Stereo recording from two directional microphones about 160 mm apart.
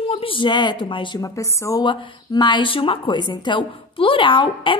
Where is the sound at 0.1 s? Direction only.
35° left (ahead or behind).